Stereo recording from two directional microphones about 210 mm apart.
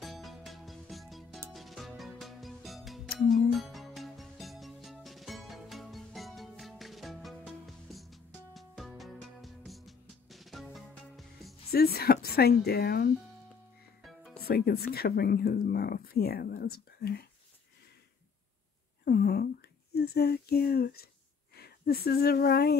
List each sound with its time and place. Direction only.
0.0 s music: centre (ahead or behind)
11.7 s speech: 45° left (ahead or behind)
14.0 s music: centre (ahead or behind)
14.4 s speech: 50° left (ahead or behind)
19.0 s a sound: 50° left (ahead or behind)
19.9 s speech: 50° left (ahead or behind)